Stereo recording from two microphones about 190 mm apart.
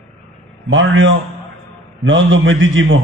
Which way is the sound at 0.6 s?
90° right.